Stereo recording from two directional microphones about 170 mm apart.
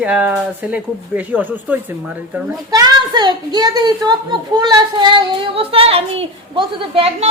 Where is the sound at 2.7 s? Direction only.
25° right (ahead or behind).